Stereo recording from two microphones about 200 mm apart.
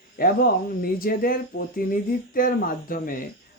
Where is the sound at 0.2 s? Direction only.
50° left (ahead or behind).